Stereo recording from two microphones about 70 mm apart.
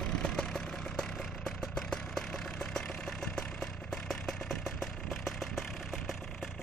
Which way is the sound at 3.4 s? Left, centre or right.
Centre.